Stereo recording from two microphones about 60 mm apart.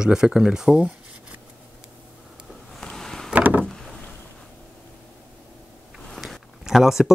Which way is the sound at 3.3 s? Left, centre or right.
Right.